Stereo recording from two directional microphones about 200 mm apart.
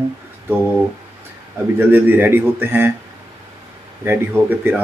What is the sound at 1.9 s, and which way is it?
Speech, 10° right (ahead or behind).